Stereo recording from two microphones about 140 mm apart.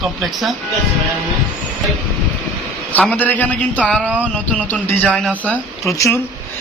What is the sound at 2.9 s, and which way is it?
A man's voice, 10° left (ahead or behind).